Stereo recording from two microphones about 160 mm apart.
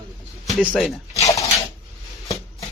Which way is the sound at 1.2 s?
20° left (ahead or behind).